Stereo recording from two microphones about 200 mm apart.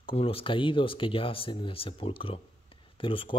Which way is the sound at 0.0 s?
30° left (ahead or behind).